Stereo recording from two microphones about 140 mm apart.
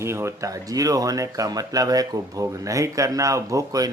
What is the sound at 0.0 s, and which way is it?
Speech, 20° right (ahead or behind).